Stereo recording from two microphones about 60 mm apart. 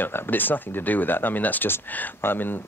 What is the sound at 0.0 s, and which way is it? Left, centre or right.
Speech, left.